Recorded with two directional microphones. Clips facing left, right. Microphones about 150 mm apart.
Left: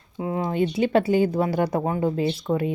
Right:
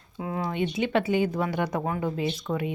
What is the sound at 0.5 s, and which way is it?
Speech, 35° left (ahead or behind).